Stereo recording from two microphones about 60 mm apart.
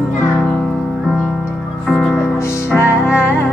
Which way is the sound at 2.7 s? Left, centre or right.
Left.